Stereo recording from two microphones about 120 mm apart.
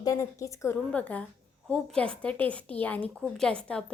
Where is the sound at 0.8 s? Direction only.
10° left (ahead or behind).